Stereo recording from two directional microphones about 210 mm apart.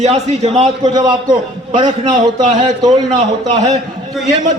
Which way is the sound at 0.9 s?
20° right (ahead or behind).